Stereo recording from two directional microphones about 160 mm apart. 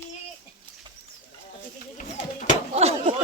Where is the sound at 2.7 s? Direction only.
40° right (ahead or behind).